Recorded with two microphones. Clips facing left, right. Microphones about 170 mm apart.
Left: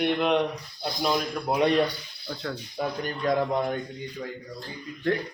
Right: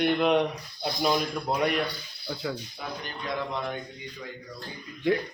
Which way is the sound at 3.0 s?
45° left (ahead or behind).